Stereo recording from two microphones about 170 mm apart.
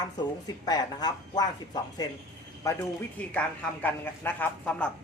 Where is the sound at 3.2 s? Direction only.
10° left (ahead or behind).